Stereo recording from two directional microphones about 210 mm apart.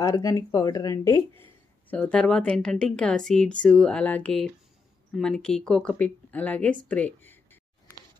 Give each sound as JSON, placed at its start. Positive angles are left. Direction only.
{"t": 0.0, "sound": "a woman's voice", "side_deg": 15}